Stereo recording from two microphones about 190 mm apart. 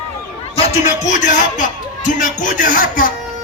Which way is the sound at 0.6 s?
40° left (ahead or behind).